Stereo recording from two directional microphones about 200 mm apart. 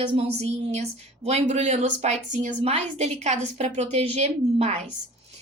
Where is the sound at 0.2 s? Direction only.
30° right (ahead or behind).